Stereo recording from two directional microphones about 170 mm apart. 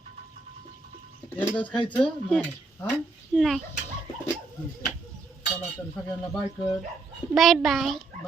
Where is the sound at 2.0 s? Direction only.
5° left (ahead or behind).